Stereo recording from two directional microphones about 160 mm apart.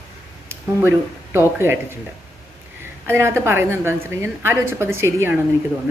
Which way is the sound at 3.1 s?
15° right (ahead or behind).